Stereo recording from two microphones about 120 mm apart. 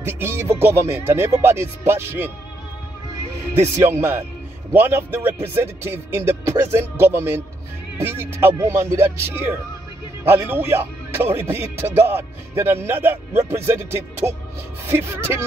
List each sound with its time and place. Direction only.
0.0 s speech: 20° right (ahead or behind)
3.7 s speech: 20° right (ahead or behind)